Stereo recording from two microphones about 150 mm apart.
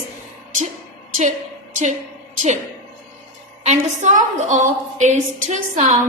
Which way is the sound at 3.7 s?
50° right (ahead or behind).